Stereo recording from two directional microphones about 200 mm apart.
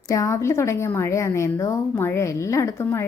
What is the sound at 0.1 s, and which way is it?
A woman's voice, 15° left (ahead or behind).